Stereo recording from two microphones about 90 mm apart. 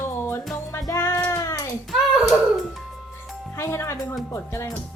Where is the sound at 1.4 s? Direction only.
40° left (ahead or behind).